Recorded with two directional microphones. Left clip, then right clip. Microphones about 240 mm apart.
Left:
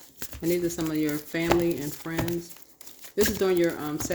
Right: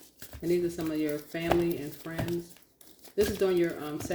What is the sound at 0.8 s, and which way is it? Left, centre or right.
Speech, left.